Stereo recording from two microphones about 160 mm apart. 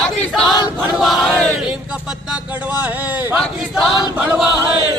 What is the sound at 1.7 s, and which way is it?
Speech, 5° right (ahead or behind).